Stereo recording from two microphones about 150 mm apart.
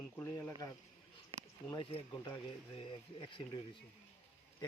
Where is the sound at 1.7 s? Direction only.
30° left (ahead or behind).